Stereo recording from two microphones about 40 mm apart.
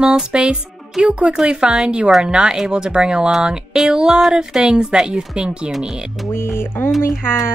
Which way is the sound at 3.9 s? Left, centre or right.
Centre.